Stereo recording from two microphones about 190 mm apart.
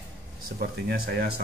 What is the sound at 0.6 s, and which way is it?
Speech, 55° right (ahead or behind).